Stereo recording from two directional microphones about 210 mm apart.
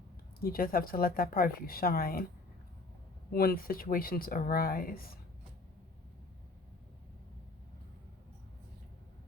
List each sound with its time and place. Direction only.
0.3 s speech: 45° left (ahead or behind)
3.3 s speech: 45° left (ahead or behind)